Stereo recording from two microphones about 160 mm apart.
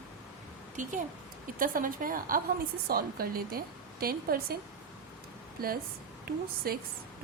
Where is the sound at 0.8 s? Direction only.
50° right (ahead or behind); by 4.5 s 70° right (ahead or behind).